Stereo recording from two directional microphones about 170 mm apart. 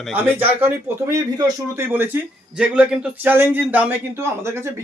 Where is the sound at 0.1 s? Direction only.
10° right (ahead or behind).